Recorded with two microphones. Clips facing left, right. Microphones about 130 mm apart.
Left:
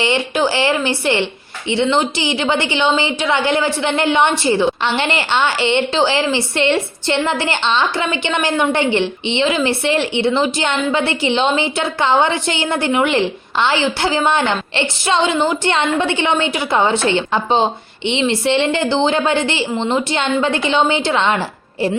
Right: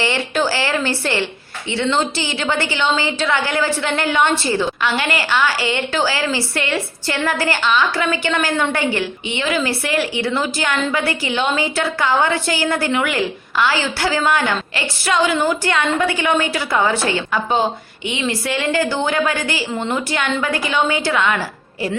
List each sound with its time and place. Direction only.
0.0 s a woman's voice: 20° left (ahead or behind)
19.7 s a woman's voice: 15° left (ahead or behind)